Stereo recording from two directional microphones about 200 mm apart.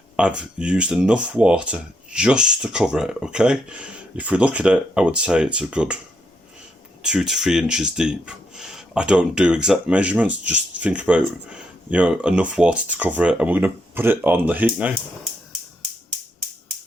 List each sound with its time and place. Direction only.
0.2 s speech: 5° right (ahead or behind)
7.0 s speech: 5° right (ahead or behind)